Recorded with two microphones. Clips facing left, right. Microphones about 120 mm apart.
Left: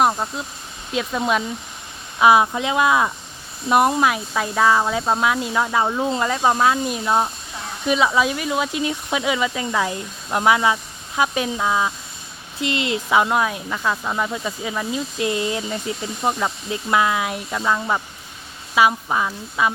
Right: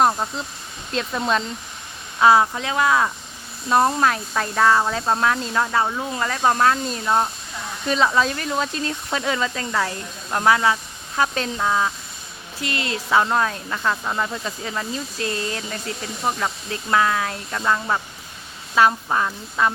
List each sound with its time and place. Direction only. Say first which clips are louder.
0.0 s speech: even; 5° left (ahead or behind)
12.5 s speech: left 4 dB; 20° left (ahead or behind)